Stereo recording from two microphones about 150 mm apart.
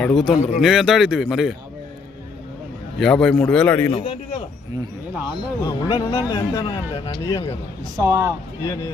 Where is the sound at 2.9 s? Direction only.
5° left (ahead or behind).